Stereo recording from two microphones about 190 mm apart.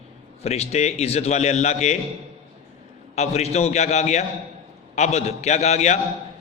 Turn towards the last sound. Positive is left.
turn(degrees=35)  # may be behind; listen again after turning